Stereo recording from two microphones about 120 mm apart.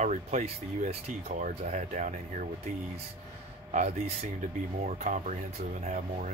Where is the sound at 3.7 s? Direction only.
70° right (ahead or behind).